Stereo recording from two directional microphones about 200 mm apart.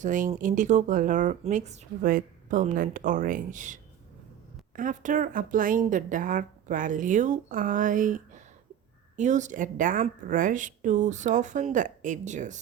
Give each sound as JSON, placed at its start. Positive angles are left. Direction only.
{"t": 0.0, "sound": "speech", "side_deg": -40}